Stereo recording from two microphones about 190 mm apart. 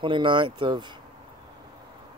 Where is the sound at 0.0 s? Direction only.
25° right (ahead or behind).